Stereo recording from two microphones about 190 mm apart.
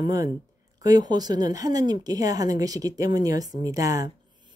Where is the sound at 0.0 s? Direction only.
20° right (ahead or behind).